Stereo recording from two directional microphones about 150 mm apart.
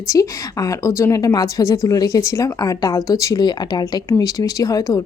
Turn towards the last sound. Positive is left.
turn(degrees=25)  # may be behind; listen again after turning